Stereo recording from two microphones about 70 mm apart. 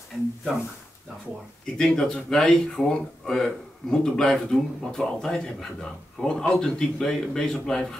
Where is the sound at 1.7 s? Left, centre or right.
Centre.